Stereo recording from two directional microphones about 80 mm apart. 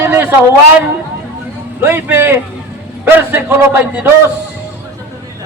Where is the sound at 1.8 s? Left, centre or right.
Right.